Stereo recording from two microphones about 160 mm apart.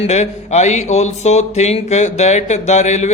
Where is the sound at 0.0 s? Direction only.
45° left (ahead or behind).